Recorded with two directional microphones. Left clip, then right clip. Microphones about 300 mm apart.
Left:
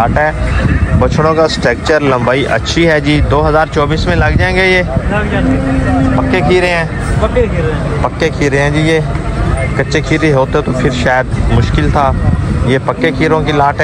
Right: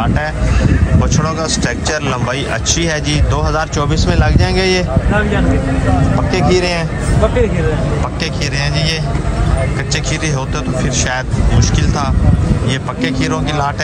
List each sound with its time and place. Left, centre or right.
0.0 s speech: centre
6.3 s speech: centre
8.2 s speech: centre
10.1 s speech: centre
12.7 s speech: centre